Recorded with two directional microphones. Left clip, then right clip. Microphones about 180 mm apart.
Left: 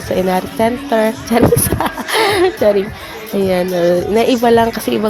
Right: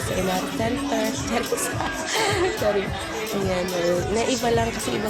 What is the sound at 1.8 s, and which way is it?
Chuckle, 50° left (ahead or behind).